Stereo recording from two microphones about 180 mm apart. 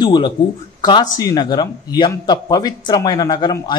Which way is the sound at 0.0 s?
25° left (ahead or behind).